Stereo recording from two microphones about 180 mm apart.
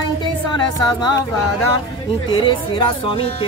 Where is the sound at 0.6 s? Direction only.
20° left (ahead or behind).